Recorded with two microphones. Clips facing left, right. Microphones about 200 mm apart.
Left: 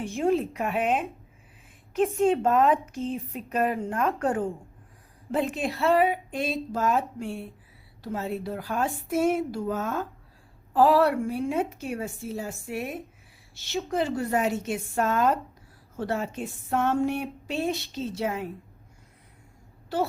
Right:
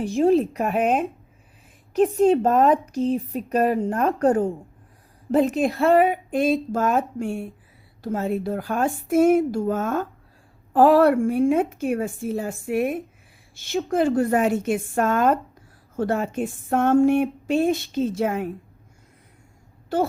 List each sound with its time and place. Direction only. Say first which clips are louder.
0.0 s speech: right 6 dB; 35° right (ahead or behind)
2.1 s a woman's voice: right 4 dB; 40° right (ahead or behind)
17.7 s a woman's voice: right 7 dB; centre (ahead or behind)
17.9 s speech: right 7 dB; 50° right (ahead or behind)